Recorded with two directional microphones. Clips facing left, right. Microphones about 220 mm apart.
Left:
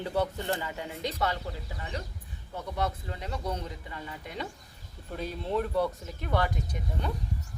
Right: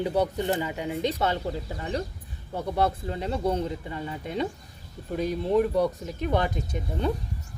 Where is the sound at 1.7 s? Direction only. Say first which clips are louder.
Right 8 dB; 40° right (ahead or behind).